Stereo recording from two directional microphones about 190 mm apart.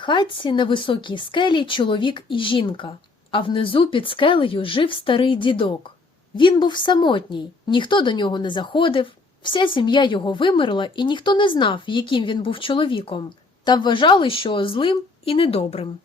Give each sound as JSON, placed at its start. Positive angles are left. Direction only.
{"t": 0.0, "sound": "a woman's voice", "side_deg": 25}